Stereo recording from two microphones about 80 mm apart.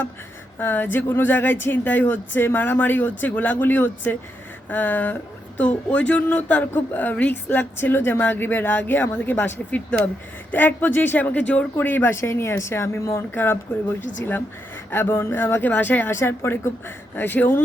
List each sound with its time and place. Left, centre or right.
0.6 s speech: left
14.8 s speech: left
16.1 s a woman's voice: left